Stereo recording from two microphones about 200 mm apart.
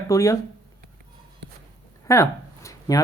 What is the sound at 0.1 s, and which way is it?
Speech, 15° left (ahead or behind).